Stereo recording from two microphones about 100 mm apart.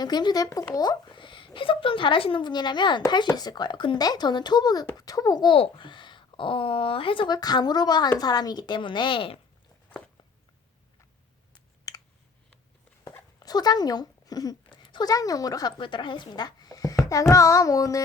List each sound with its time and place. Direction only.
0.0 s a child's voice: 45° left (ahead or behind)
5.5 s a woman's voice: 55° left (ahead or behind)
7.3 s speech: 45° left (ahead or behind); by 9.4 s 60° left (ahead or behind)
11.9 s a sound: 35° left (ahead or behind)
13.4 s a woman's voice: 40° left (ahead or behind)
15.8 s a child's voice: 55° left (ahead or behind); by 18.0 s 35° left (ahead or behind)